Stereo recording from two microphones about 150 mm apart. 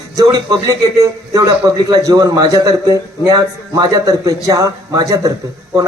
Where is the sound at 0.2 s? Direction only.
25° right (ahead or behind).